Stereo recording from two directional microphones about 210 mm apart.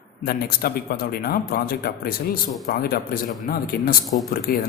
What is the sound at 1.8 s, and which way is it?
A man's voice, 45° left (ahead or behind).